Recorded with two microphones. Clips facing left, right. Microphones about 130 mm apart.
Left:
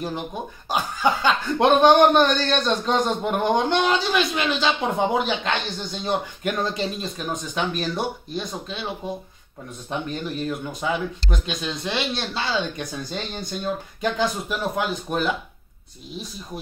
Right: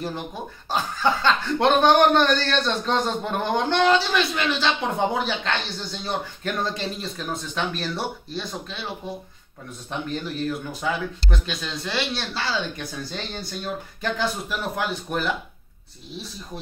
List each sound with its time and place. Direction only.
0.7 s speech: 15° left (ahead or behind)
10.8 s speech: 20° left (ahead or behind)